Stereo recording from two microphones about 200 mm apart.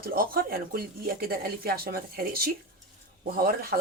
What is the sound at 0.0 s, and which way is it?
A man's voice, 45° right (ahead or behind).